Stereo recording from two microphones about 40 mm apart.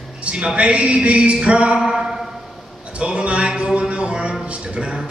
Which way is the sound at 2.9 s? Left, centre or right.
Right.